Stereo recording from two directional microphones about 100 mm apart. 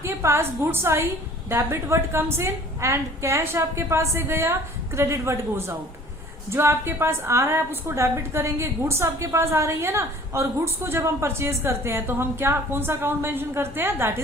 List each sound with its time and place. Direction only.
0.0 s a woman's voice: 30° right (ahead or behind)